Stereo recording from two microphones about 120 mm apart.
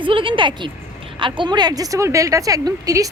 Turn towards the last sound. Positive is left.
turn(degrees=-30)  # may be behind; listen again after turning